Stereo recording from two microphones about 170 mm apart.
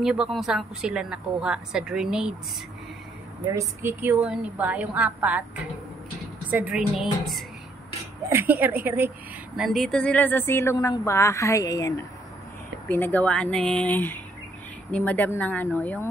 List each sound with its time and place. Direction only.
0.0 s a woman's voice: 5° right (ahead or behind)
3.5 s a woman's voice: 15° right (ahead or behind)
6.5 s a woman's voice: 5° right (ahead or behind)
8.3 s a woman's voice: 10° right (ahead or behind)
9.6 s speech: centre (ahead or behind)